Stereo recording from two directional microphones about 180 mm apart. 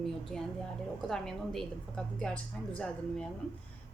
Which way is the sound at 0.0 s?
Centre (ahead or behind).